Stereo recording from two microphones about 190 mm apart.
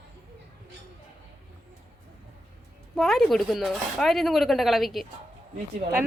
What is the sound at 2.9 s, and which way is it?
Speech, centre (ahead or behind).